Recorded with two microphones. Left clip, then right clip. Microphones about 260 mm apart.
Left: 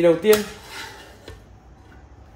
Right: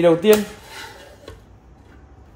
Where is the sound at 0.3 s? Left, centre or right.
Centre.